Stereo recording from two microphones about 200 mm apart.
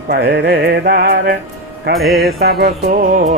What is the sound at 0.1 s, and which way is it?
Music, 55° right (ahead or behind).